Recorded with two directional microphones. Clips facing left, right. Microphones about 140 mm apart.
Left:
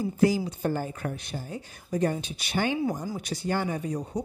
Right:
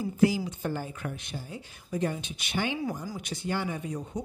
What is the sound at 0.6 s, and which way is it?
A woman's voice, 45° left (ahead or behind).